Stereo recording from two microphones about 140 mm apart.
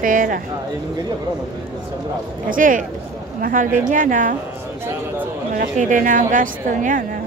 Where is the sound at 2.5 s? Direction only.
75° right (ahead or behind).